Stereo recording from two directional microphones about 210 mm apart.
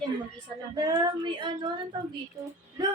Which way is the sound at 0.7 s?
20° right (ahead or behind).